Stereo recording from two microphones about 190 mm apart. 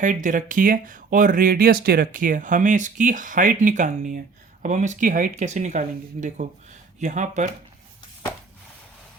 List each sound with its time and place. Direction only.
0.0 s speech: 40° right (ahead or behind)